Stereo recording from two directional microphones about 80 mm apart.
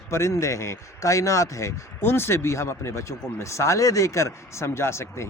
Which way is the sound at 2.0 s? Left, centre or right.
Left.